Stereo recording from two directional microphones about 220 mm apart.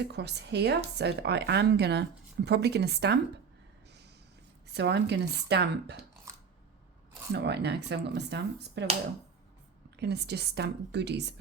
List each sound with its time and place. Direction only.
0.0 s a woman's voice: 50° right (ahead or behind)
4.7 s a woman's voice: 50° right (ahead or behind)
6.3 s a sound: 15° right (ahead or behind)
7.3 s a woman's voice: 50° right (ahead or behind)
10.0 s a woman's voice: 50° right (ahead or behind)